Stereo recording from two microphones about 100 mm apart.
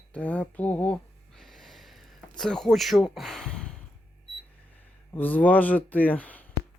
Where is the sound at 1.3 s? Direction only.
5° left (ahead or behind).